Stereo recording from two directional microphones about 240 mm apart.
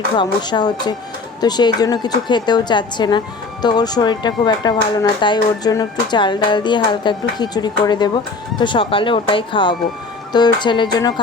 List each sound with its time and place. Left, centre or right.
0.2 s a woman's voice: centre